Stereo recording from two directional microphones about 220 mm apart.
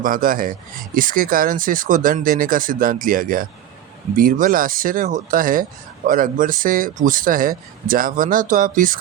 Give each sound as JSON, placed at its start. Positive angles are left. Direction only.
{"t": 0.0, "sound": "speech", "side_deg": -40}